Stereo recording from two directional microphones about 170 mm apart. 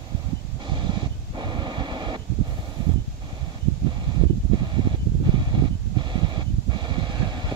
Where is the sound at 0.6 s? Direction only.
25° right (ahead or behind).